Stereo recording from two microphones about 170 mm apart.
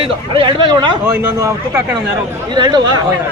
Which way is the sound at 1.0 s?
10° right (ahead or behind).